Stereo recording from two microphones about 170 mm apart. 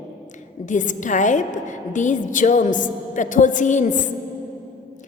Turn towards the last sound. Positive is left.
turn(degrees=50)  # may be behind; listen again after turning